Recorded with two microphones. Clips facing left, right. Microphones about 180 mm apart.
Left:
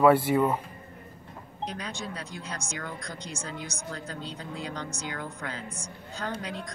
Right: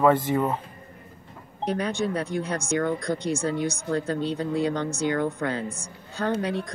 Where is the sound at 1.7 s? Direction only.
60° right (ahead or behind).